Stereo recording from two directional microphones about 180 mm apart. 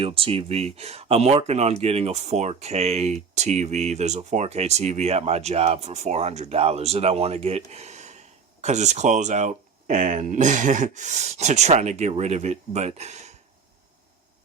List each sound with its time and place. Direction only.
0.0 s speech: 30° right (ahead or behind)